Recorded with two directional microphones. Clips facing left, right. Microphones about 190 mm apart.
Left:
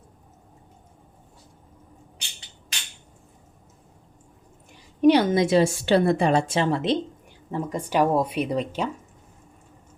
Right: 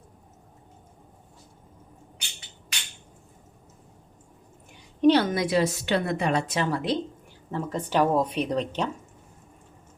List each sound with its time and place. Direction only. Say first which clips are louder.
4.7 s a woman's voice: left 2 dB; 10° left (ahead or behind)
7.5 s speech: left 1 dB; 15° left (ahead or behind)